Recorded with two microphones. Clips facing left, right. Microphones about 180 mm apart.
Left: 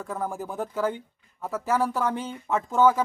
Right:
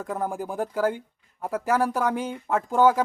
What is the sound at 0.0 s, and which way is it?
Speech, 15° right (ahead or behind).